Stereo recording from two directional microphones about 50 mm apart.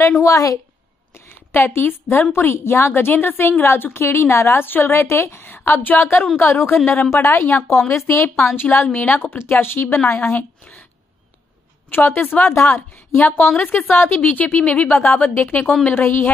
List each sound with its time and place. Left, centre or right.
0.2 s a woman's voice: left
1.1 s a woman's voice: left
2.3 s a woman's voice: left
5.7 s speech: left
6.4 s a woman's voice: left
8.5 s a woman's voice: left
10.6 s a sound: left
11.9 s a woman's voice: left
12.5 s a woman's voice: left
13.6 s a woman's voice: left
14.2 s speech: left
15.0 s a woman's voice: left